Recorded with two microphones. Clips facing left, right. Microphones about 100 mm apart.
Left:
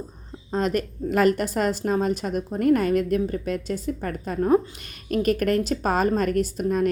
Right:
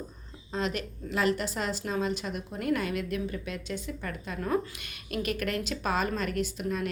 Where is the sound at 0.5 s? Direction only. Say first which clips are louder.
Left 8 dB; 45° left (ahead or behind).